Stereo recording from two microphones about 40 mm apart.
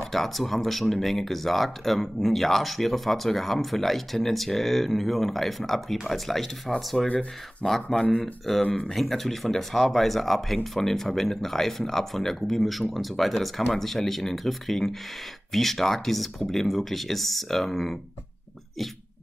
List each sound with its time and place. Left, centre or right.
0.0 s speech: centre
7.9 s speech: left
8.5 s speech: centre